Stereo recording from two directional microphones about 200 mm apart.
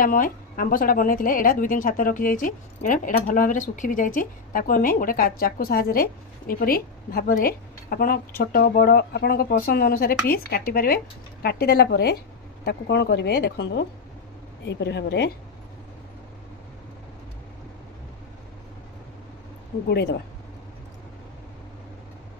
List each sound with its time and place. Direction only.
0.0 s a woman's voice: 45° left (ahead or behind)
19.9 s speech: 55° left (ahead or behind)